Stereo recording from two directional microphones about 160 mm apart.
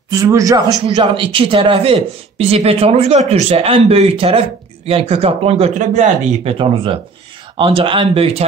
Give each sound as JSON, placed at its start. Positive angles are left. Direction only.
{"t": 0.1, "sound": "a man's voice", "side_deg": -20}
{"t": 6.6, "sound": "a man's voice", "side_deg": -35}